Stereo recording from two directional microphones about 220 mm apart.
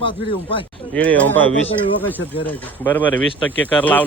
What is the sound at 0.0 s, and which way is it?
Speech, 25° left (ahead or behind).